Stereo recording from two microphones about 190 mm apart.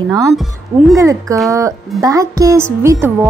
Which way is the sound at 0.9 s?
15° right (ahead or behind).